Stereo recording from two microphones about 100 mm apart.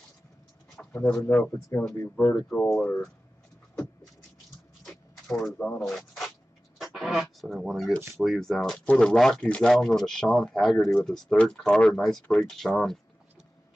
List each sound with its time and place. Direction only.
0.7 s bird: 25° left (ahead or behind)
1.2 s speech: 15° left (ahead or behind)
4.8 s a sound: 5° left (ahead or behind)
5.8 s speech: 5° left (ahead or behind)